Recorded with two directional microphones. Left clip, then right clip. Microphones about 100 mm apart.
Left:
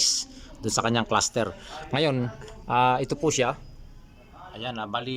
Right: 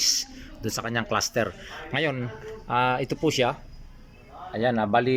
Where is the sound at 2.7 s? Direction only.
15° left (ahead or behind).